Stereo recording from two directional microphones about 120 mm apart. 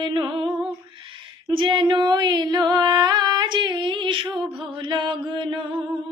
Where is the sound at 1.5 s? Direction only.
40° right (ahead or behind).